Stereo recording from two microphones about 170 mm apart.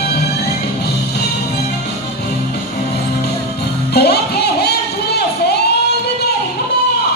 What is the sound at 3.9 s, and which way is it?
Music, 70° left (ahead or behind).